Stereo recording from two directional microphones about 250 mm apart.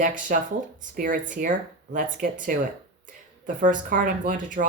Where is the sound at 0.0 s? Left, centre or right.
Right.